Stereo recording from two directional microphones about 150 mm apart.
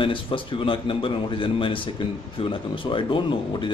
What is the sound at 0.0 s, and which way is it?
A man's voice, 35° left (ahead or behind).